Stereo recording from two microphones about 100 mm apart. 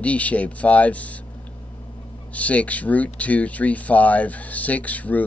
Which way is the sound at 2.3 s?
15° left (ahead or behind).